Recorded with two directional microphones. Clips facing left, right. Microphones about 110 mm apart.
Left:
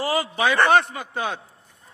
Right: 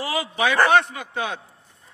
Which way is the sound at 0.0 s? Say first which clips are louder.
Left 1 dB; 40° left (ahead or behind).